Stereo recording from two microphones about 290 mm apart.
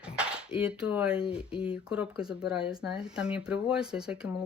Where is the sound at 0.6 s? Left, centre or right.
Centre.